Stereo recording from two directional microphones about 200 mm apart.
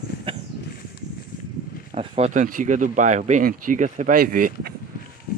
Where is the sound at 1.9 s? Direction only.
30° right (ahead or behind).